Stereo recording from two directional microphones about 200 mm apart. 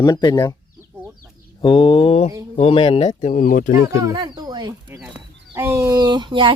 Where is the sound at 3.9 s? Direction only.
15° right (ahead or behind).